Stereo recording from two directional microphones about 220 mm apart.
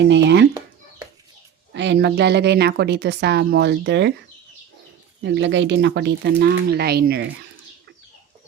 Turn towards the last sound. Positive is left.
turn(degrees=-45)  # may be behind; listen again after turning